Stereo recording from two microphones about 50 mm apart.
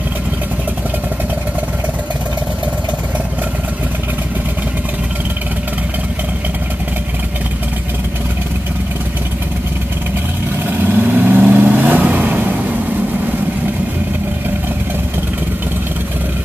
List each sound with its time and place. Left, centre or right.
10.7 s vehicle: right